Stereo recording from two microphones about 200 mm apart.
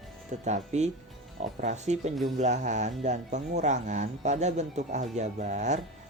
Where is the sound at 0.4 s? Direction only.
35° right (ahead or behind).